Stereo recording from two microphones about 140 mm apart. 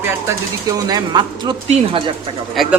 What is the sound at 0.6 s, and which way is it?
Speech, 25° right (ahead or behind).